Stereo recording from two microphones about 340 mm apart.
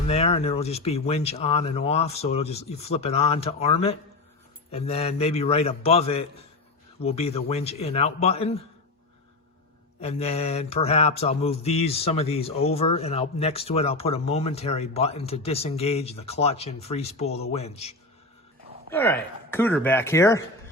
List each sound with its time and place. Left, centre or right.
0.1 s mantra: centre
10.0 s mantra: centre
17.2 s speech: left
17.5 s mantra: centre
18.9 s mantra: centre